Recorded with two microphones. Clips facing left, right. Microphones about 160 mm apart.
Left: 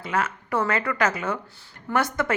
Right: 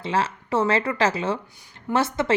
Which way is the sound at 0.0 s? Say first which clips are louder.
Right 2 dB; 30° right (ahead or behind).